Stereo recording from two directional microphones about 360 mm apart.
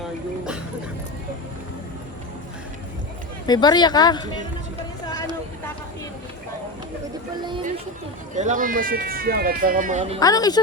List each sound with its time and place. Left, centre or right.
3.4 s speech: centre
7.4 s a sound: centre
8.4 s speech: right
10.2 s speech: centre